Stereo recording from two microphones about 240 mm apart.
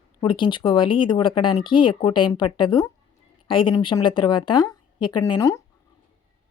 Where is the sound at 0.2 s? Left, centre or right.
Left.